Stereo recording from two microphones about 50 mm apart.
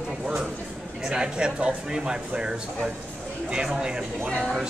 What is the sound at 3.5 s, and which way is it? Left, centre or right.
Speech, centre.